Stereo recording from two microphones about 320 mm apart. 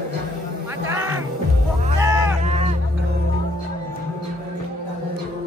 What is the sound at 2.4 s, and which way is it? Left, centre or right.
Music, centre.